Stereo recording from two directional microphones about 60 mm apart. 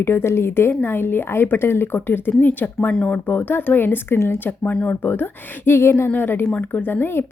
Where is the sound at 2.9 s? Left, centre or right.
Centre.